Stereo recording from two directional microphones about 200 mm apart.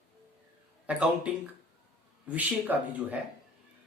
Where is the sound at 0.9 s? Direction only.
5° right (ahead or behind).